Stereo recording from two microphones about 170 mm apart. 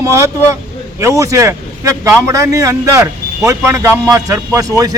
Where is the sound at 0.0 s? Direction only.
20° right (ahead or behind).